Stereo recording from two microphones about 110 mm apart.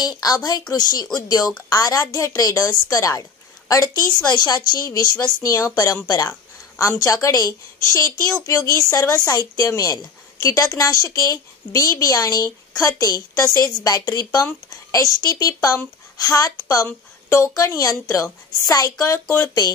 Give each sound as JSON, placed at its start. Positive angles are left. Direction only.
{"t": 0.0, "sound": "a woman's voice", "side_deg": 35}